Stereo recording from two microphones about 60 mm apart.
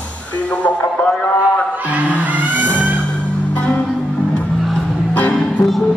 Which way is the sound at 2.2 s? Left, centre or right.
Right.